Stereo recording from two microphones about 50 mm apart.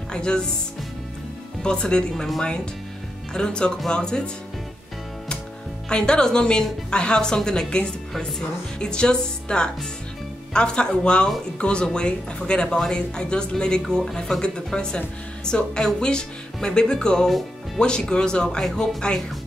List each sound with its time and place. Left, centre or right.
0.1 s speech: centre
1.6 s a woman's voice: centre
3.3 s a woman's voice: centre
5.9 s a woman's voice: centre